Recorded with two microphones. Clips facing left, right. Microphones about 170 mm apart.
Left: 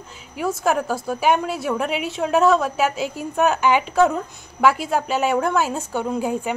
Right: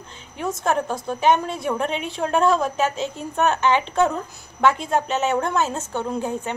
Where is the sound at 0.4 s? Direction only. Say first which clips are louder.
Left 2 dB; 10° left (ahead or behind).